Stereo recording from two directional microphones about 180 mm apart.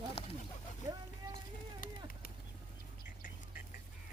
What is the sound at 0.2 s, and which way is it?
Bird, 30° left (ahead or behind).